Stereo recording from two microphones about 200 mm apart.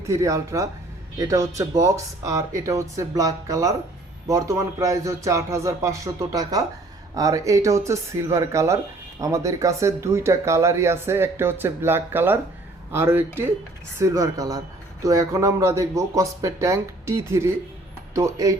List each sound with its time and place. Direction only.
0.0 s speech: 15° right (ahead or behind)